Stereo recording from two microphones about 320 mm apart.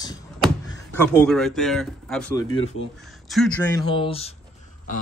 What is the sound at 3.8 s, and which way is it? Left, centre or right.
Speech, centre.